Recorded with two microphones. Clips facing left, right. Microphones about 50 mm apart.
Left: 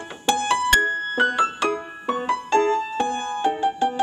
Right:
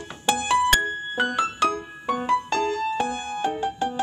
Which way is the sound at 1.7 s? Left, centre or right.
Centre.